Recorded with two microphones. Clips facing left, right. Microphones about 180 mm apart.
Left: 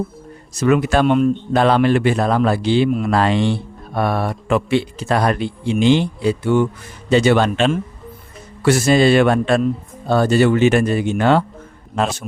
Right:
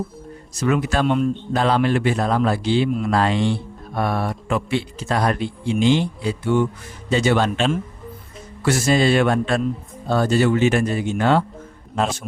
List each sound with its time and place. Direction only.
0.6 s a man's voice: 70° left (ahead or behind)